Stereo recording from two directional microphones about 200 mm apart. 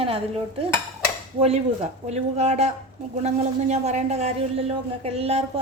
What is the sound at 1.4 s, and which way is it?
A man's voice, 30° right (ahead or behind).